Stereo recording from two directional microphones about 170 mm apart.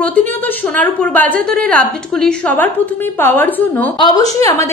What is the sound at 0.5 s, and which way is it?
A woman's voice, 10° left (ahead or behind).